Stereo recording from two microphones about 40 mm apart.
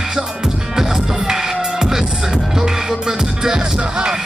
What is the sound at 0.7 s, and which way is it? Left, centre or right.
Music, centre.